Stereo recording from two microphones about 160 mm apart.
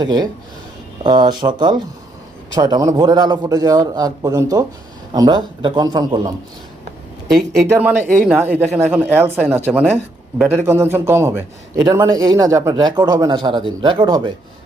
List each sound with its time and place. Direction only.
0.0 s speech: 25° right (ahead or behind)
7.3 s speech: centre (ahead or behind)
8.4 s a man's voice: 10° right (ahead or behind); by 14.3 s 30° right (ahead or behind)